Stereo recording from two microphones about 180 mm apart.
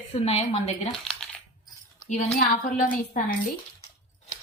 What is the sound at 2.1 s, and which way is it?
Speech, 45° left (ahead or behind).